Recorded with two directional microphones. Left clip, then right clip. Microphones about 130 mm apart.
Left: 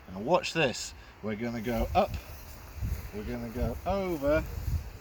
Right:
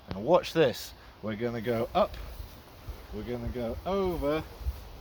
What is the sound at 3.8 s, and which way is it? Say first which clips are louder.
Speech: even; 30° right (ahead or behind).